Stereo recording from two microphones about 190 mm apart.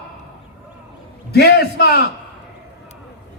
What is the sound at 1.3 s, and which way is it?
Speech, 60° left (ahead or behind).